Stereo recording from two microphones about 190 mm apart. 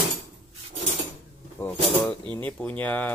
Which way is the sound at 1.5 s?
15° left (ahead or behind).